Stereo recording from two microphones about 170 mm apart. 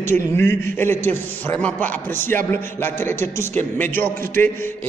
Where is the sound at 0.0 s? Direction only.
15° left (ahead or behind).